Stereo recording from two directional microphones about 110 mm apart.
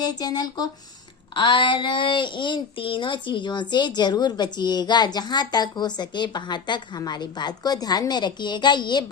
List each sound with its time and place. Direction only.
0.0 s speech: 35° left (ahead or behind)